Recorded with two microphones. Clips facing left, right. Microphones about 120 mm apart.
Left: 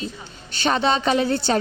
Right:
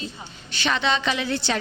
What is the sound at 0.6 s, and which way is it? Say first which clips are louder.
Speech: left 4 dB; 45° left (ahead or behind).